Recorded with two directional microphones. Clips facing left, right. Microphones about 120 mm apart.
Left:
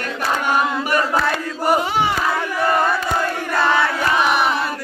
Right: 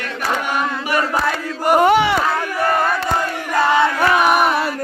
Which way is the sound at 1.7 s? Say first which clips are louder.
Right 7 dB; 60° right (ahead or behind).